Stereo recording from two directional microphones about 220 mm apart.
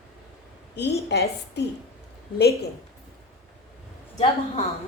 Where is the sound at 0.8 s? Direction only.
50° left (ahead or behind).